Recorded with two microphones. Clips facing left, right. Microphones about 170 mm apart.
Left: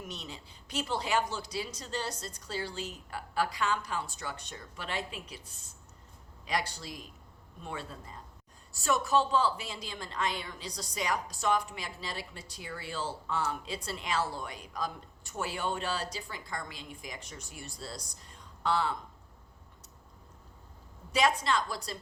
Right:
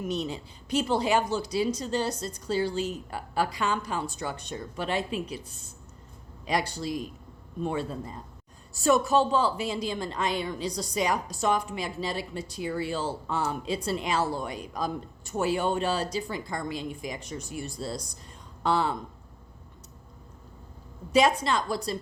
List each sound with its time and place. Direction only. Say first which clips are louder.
0.1 s a woman's voice: right 13 dB; 15° right (ahead or behind)
6.5 s a woman's voice: right 6 dB; 20° right (ahead or behind)
21.1 s a woman's voice: right 5 dB; 20° right (ahead or behind)